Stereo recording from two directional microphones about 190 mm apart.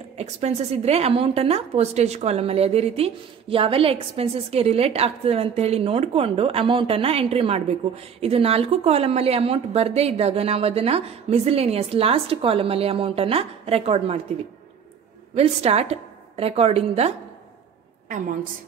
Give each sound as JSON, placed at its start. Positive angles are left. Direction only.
{"t": 0.2, "sound": "a woman's voice", "side_deg": -35}
{"t": 15.3, "sound": "a woman's voice", "side_deg": -35}